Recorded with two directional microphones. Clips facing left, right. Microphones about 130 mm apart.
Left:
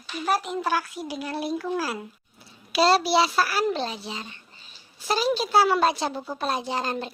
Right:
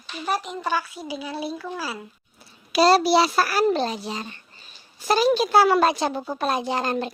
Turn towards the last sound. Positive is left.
turn(degrees=-55)  # may be behind; listen again after turning